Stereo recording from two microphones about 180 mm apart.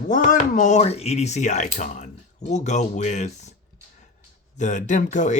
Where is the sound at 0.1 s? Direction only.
45° left (ahead or behind).